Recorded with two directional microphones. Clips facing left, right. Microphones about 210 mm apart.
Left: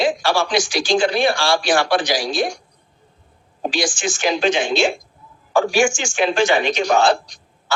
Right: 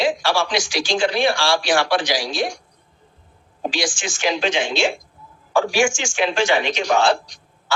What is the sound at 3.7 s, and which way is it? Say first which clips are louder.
A man's voice: left 4 dB; 45° left (ahead or behind).